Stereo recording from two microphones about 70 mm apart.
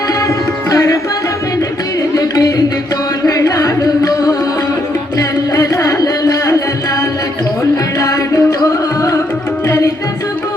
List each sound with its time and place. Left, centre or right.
0.7 s music: left
2.1 s music: left
7.9 s music: left
9.6 s tabla: left